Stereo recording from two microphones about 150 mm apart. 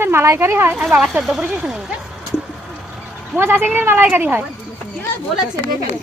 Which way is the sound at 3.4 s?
15° right (ahead or behind).